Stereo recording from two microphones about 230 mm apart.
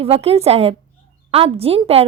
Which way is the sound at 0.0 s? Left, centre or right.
Right.